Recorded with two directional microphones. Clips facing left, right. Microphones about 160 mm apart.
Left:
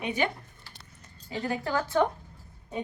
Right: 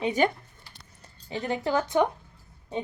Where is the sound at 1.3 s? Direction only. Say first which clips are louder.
Right 3 dB; 20° right (ahead or behind).